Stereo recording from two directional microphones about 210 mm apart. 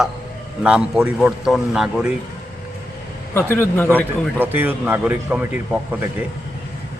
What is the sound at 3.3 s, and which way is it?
Speech, 10° left (ahead or behind).